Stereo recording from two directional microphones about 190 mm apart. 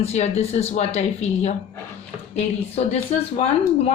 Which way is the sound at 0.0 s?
35° left (ahead or behind).